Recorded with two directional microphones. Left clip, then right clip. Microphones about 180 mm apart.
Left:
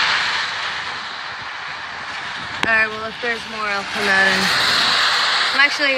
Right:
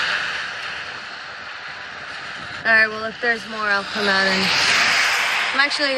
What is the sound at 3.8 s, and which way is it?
Speech, 55° left (ahead or behind).